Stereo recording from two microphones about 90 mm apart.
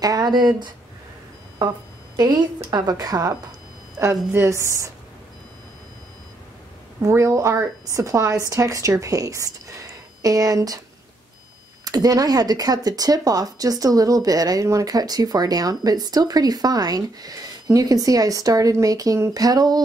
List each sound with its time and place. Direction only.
0.0 s speech: 45° right (ahead or behind)
2.1 s speech: 50° right (ahead or behind)
4.0 s a woman's voice: 30° right (ahead or behind)
7.0 s a woman's voice: 35° right (ahead or behind)
11.8 s speech: 45° right (ahead or behind)